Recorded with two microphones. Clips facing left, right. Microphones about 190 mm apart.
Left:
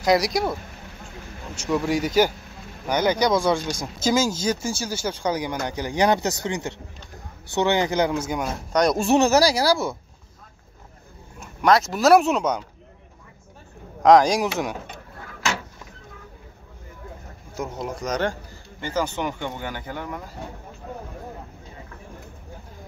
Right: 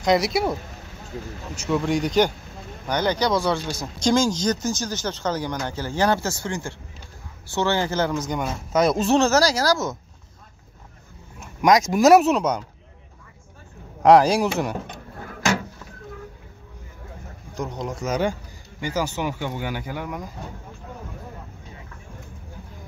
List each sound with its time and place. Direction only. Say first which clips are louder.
0.0 s speech: even; centre (ahead or behind)
1.7 s speech: even; 5° left (ahead or behind)
11.6 s speech: right 2 dB; 15° right (ahead or behind)
14.0 s speech: right 1 dB; 5° right (ahead or behind)
17.6 s speech: even; 5° left (ahead or behind)